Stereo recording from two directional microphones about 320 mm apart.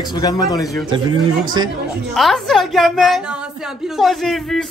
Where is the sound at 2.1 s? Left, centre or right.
Centre.